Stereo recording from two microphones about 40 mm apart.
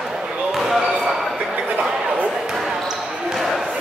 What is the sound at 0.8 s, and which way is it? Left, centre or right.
Basketball bounce, right.